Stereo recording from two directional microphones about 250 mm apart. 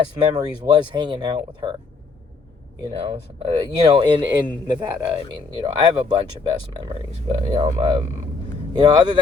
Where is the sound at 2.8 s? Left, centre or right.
Centre.